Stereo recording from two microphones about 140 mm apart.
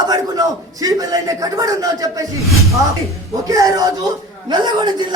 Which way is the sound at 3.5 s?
25° right (ahead or behind).